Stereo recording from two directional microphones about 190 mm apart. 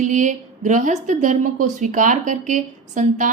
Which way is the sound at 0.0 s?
40° right (ahead or behind).